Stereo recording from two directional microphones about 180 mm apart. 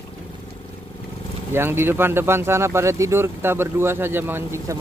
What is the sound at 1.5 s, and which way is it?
Speech, 15° right (ahead or behind).